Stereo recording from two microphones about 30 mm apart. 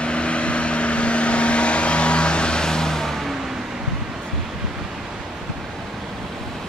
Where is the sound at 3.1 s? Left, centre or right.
Centre.